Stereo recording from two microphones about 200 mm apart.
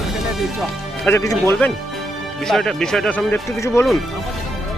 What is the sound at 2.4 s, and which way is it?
Speech, centre (ahead or behind).